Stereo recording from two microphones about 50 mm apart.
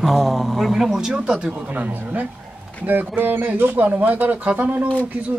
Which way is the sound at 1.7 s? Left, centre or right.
Right.